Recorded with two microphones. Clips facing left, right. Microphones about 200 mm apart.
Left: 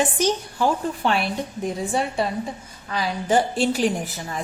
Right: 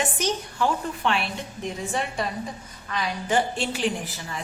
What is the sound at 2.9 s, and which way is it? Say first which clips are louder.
A woman's voice: left 4 dB; 35° left (ahead or behind).